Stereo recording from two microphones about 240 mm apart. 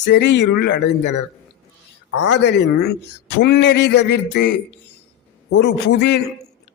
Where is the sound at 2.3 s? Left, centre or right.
Left.